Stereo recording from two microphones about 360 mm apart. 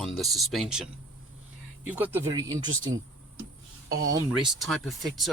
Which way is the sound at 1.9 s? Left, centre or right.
Centre.